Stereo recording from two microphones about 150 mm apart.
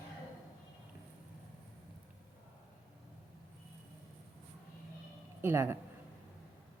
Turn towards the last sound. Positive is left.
turn(degrees=-15)  # may be behind; listen again after turning